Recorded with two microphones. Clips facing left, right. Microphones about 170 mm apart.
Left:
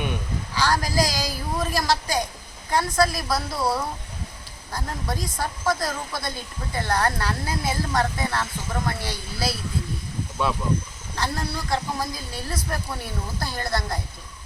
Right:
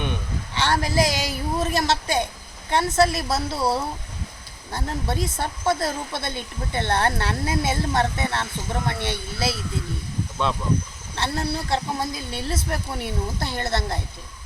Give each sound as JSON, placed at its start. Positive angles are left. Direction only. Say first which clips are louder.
{"t": 0.5, "sound": "speech", "louder": "right 1 dB", "side_deg": -25}
{"t": 11.1, "sound": "speech", "louder": "right 2 dB", "side_deg": -25}